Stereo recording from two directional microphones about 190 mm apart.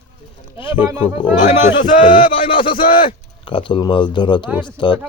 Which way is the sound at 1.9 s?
45° left (ahead or behind).